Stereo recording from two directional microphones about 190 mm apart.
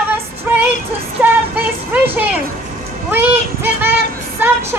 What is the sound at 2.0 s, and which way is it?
A child's voice, 10° right (ahead or behind).